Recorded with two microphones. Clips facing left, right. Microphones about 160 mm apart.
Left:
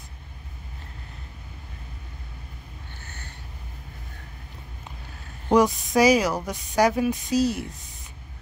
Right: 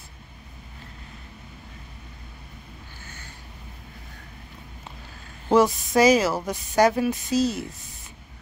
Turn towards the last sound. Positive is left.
turn(degrees=10)  # may be behind; listen again after turning